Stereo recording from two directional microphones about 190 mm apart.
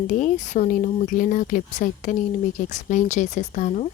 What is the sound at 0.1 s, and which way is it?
Speech, 40° left (ahead or behind).